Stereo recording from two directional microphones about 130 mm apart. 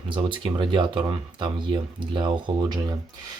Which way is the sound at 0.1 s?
40° right (ahead or behind).